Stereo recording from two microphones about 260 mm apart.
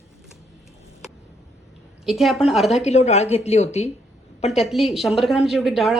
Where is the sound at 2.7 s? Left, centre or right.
Left.